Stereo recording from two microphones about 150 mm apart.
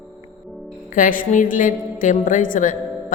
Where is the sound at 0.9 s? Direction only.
65° left (ahead or behind).